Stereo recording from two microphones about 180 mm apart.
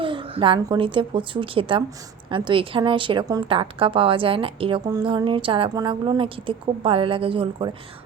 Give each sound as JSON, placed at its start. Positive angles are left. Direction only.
{"t": 0.0, "sound": "a woman's voice", "side_deg": -30}